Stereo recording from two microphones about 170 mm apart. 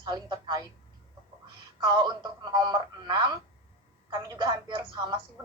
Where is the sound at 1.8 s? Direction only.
25° right (ahead or behind).